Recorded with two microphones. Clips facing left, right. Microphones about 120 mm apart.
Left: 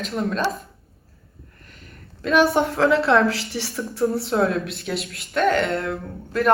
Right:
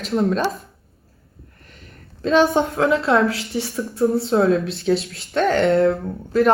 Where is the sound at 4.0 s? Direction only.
25° right (ahead or behind).